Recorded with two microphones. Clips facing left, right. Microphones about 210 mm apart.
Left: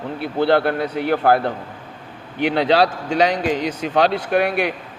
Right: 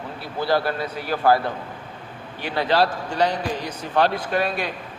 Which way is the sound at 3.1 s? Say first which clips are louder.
Left 5 dB; 90° left.